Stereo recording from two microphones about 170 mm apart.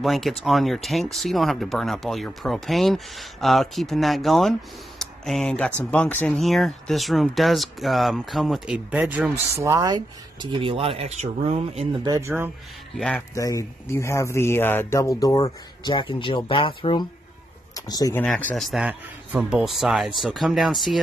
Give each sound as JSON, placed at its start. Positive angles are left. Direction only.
{"t": 0.0, "sound": "speech", "side_deg": 0}
{"t": 12.0, "sound": "speech", "side_deg": -20}
{"t": 12.9, "sound": "speech", "side_deg": 5}
{"t": 13.3, "sound": "speech", "side_deg": 20}
{"t": 18.2, "sound": "speech", "side_deg": 5}